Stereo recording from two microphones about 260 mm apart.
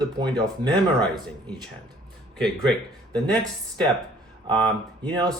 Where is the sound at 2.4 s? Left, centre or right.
Centre.